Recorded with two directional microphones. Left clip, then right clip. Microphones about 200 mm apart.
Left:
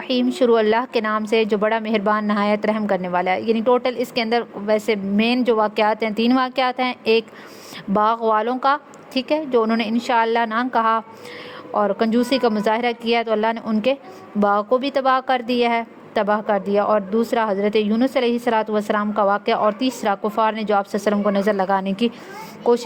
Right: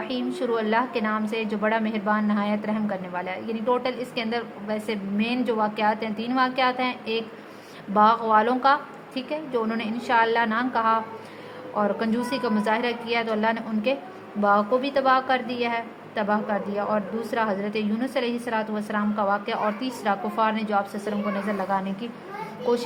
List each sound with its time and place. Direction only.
0.1 s a woman's voice: 45° left (ahead or behind)